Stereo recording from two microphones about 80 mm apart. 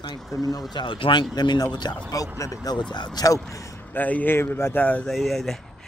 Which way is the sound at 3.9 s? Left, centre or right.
Left.